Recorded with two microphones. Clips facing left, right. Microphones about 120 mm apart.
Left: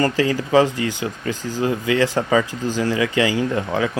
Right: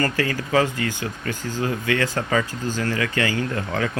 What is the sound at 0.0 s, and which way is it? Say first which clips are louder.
Speech: left 4 dB; 20° left (ahead or behind).